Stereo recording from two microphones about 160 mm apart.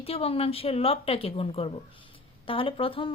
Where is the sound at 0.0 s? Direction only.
40° left (ahead or behind).